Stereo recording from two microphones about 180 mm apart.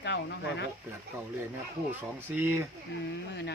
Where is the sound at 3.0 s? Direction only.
75° left (ahead or behind).